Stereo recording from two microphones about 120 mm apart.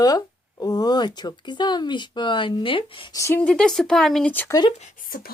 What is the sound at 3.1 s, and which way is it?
Speech, 25° left (ahead or behind).